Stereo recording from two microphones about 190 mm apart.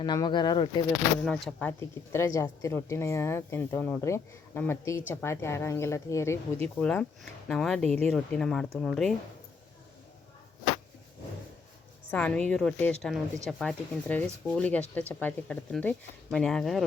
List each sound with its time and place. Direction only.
0.0 s speech: 25° left (ahead or behind)
1.2 s speech: 5° left (ahead or behind)
6.7 s speech: 5° left (ahead or behind)
12.1 s speech: 5° left (ahead or behind)